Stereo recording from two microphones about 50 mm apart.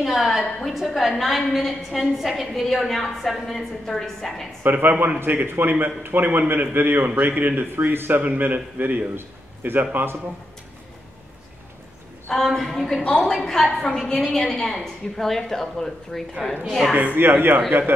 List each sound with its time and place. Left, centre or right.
0.0 s a woman's voice: centre
4.6 s a man's voice: right
9.1 s a sound: right
9.8 s a man's voice: right
12.3 s a woman's voice: centre
16.9 s a man's voice: right